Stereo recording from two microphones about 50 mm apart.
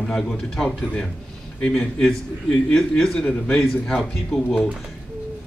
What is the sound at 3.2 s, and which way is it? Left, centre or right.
Speech, centre.